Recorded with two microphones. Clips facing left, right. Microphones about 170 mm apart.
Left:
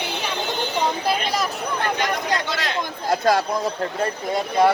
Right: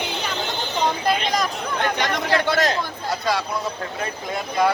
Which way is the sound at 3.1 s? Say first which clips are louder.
Left 5 dB; 50° left (ahead or behind).